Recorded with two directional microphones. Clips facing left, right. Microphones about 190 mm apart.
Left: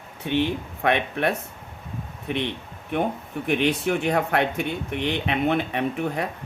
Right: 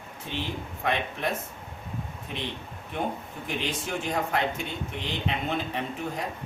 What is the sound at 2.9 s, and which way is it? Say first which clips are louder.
Speech: left 6 dB; 65° left (ahead or behind).